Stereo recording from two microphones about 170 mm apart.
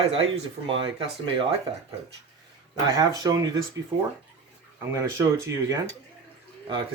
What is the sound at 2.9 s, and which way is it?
Speech, 25° right (ahead or behind).